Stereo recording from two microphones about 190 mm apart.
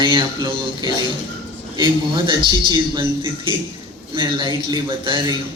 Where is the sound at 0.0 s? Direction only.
25° right (ahead or behind).